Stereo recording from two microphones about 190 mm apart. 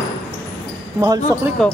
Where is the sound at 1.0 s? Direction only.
20° right (ahead or behind).